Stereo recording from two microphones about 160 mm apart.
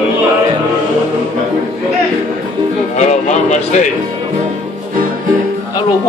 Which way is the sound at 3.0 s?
45° left (ahead or behind).